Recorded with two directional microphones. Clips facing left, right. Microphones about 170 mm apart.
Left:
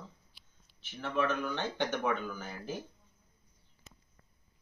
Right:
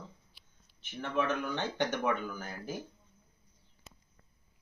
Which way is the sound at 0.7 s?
15° right (ahead or behind).